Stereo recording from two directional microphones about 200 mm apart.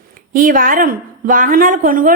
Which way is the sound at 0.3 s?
45° right (ahead or behind).